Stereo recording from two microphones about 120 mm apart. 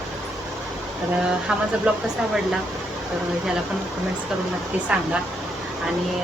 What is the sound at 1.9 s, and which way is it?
Speech, 10° right (ahead or behind).